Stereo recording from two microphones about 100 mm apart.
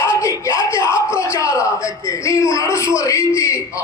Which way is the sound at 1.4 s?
30° left (ahead or behind).